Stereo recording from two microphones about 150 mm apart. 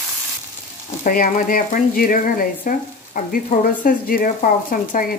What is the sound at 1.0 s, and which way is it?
Speech, 65° left (ahead or behind).